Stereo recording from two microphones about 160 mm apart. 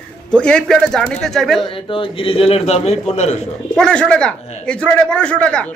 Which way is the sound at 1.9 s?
35° left (ahead or behind).